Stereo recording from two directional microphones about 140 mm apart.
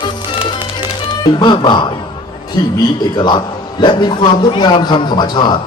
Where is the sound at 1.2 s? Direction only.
30° left (ahead or behind).